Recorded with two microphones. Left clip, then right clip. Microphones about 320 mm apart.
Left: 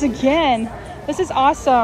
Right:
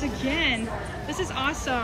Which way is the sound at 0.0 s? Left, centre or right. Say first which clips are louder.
Left 10 dB; centre.